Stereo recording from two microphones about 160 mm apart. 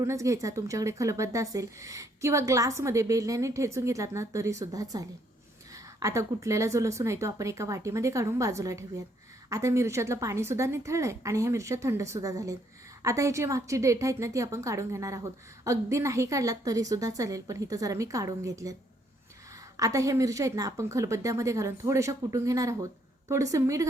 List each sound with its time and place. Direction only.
0.0 s a woman's voice: 20° right (ahead or behind)